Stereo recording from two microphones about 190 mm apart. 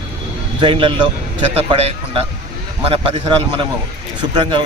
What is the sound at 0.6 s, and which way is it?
A man's voice, 30° right (ahead or behind).